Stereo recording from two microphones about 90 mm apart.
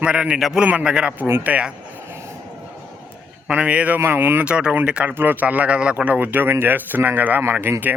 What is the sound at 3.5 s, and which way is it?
Speech, 15° right (ahead or behind).